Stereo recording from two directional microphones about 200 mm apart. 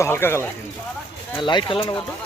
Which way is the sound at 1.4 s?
25° left (ahead or behind).